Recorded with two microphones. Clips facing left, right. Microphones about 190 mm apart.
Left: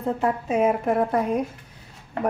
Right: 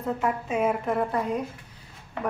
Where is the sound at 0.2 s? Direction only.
40° left (ahead or behind).